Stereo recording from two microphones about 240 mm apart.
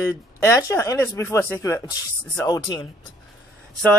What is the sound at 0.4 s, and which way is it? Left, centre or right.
Speech, centre.